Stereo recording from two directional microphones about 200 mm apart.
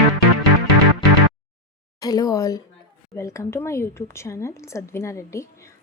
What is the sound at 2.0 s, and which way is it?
A woman's voice, 20° left (ahead or behind).